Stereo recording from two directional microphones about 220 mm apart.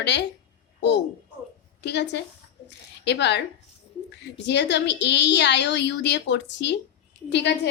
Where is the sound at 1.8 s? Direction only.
50° left (ahead or behind).